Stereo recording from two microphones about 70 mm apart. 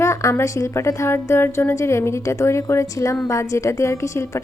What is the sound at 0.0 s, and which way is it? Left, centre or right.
A woman's voice, left.